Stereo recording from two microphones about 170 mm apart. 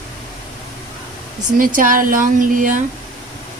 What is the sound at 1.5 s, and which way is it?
Speech, 50° right (ahead or behind).